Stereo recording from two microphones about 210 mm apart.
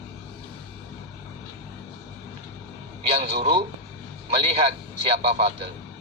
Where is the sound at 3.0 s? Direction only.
30° right (ahead or behind).